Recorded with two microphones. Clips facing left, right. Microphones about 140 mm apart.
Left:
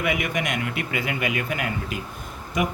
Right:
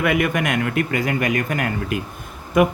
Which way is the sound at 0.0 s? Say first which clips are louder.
Right 6 dB; 55° right (ahead or behind).